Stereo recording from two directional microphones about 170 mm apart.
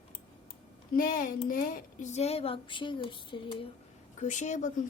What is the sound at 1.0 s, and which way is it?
Speech, 55° left (ahead or behind).